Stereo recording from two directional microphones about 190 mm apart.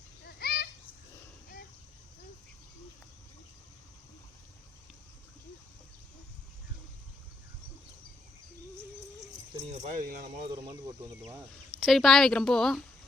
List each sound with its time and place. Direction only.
0.3 s children playing: 55° left (ahead or behind)
9.6 s speech: 35° right (ahead or behind)
11.8 s a woman's voice: centre (ahead or behind)